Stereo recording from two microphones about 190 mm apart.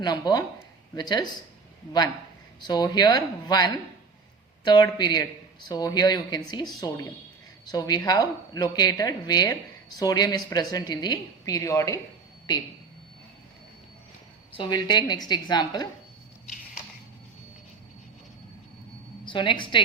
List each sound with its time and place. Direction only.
0.0 s speech: 20° left (ahead or behind)
2.6 s speech: 20° left (ahead or behind)
14.5 s speech: 25° left (ahead or behind)
19.2 s a woman's voice: 25° left (ahead or behind)